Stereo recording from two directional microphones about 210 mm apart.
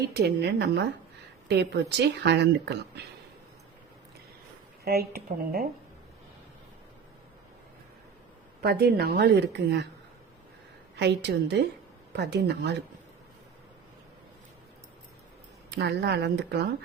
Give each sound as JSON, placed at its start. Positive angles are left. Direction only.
{"t": 0.2, "sound": "speech", "side_deg": -50}
{"t": 4.9, "sound": "speech", "side_deg": -45}
{"t": 8.6, "sound": "speech", "side_deg": -50}
{"t": 10.9, "sound": "speech", "side_deg": -55}
{"t": 15.7, "sound": "speech", "side_deg": -50}